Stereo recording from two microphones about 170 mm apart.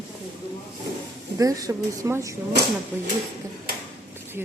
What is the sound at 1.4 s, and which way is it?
Speech, 20° right (ahead or behind).